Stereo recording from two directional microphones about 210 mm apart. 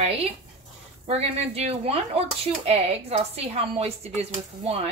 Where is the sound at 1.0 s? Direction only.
30° right (ahead or behind).